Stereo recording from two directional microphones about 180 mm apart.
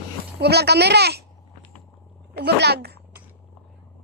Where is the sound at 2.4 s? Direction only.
65° right (ahead or behind).